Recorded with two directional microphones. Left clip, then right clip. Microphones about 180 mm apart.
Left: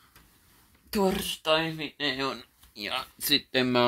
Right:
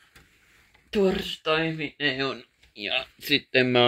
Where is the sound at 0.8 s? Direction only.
30° left (ahead or behind).